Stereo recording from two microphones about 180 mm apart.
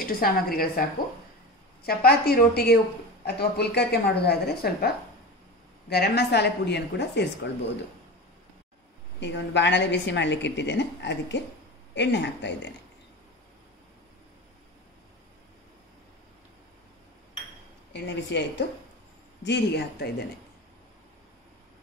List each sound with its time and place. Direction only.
0.0 s a woman's voice: 55° left (ahead or behind)
1.9 s a woman's voice: 60° left (ahead or behind)
9.2 s a woman's voice: 80° left
18.0 s a woman's voice: 75° left (ahead or behind)